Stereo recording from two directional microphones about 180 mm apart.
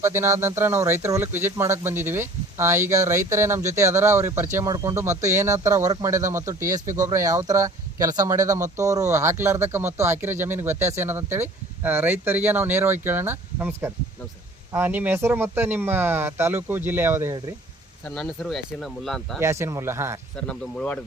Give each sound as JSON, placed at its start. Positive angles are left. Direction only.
{"t": 0.0, "sound": "speech", "side_deg": -15}
{"t": 18.1, "sound": "speech", "side_deg": 0}
{"t": 19.4, "sound": "speech", "side_deg": -15}
{"t": 20.5, "sound": "speech", "side_deg": 5}